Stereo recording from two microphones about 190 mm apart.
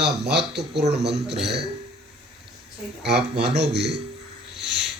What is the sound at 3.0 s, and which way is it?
Speech, 60° right (ahead or behind).